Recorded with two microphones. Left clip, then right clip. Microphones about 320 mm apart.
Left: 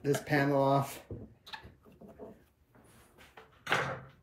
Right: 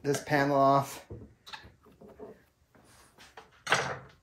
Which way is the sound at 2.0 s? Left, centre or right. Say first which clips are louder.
Right 2 dB; centre.